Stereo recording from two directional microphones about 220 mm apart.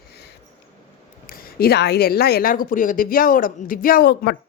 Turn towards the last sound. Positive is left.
turn(degrees=45)  # may be behind; listen again after turning